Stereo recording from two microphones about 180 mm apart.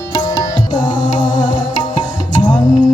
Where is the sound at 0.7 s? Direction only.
25° left (ahead or behind).